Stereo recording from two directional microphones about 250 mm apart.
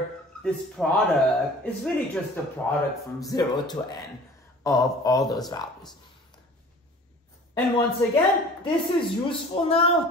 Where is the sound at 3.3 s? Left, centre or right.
Centre.